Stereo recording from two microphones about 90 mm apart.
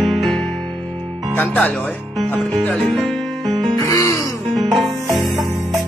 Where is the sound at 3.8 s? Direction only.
35° left (ahead or behind).